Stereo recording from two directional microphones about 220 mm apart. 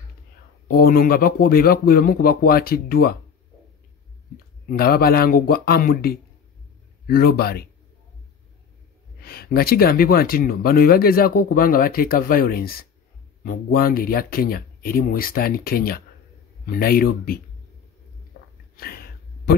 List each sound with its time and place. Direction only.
0.7 s speech: 40° left (ahead or behind)
4.6 s speech: 45° left (ahead or behind)
9.2 s speech: 45° left (ahead or behind)
18.8 s a sound: 45° left (ahead or behind)